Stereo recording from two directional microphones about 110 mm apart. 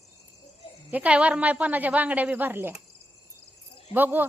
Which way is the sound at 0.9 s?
10° right (ahead or behind).